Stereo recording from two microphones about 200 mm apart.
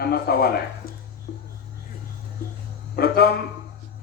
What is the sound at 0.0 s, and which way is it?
Speech, 50° left (ahead or behind).